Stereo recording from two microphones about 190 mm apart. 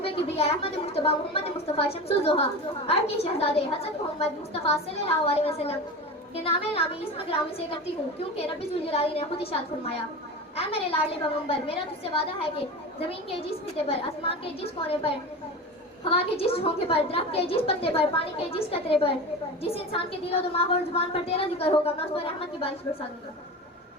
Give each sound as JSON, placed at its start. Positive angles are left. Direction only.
{"t": 0.0, "sound": "a woman's voice", "side_deg": 30}